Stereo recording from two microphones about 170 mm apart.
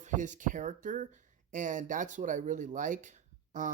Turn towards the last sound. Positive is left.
turn(degrees=-50)  # may be behind; listen again after turning